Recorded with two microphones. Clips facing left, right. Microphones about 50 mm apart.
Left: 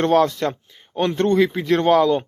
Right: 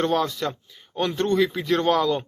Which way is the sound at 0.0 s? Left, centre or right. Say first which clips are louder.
Left 6 dB; left.